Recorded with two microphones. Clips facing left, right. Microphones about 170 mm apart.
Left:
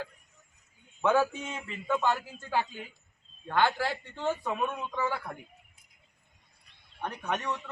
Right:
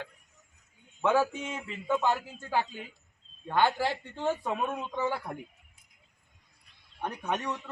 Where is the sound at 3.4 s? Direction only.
15° right (ahead or behind).